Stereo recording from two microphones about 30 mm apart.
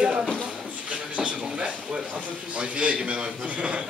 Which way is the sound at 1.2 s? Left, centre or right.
Right.